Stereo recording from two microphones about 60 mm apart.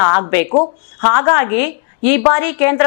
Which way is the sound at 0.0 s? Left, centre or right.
Left.